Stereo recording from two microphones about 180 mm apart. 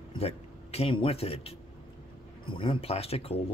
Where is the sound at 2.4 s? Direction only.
30° left (ahead or behind).